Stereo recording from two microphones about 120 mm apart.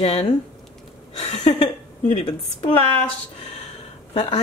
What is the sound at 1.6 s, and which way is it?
A woman's voice, 45° left (ahead or behind).